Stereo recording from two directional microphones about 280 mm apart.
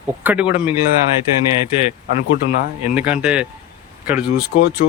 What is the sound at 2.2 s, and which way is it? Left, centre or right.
Speech, left.